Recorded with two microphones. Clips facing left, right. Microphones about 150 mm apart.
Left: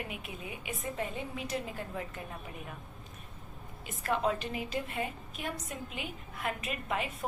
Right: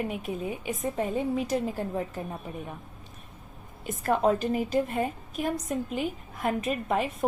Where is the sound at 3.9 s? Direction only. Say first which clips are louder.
Right 7 dB; 45° right (ahead or behind).